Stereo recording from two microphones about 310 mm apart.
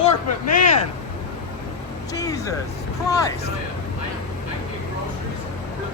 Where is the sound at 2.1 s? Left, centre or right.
Centre.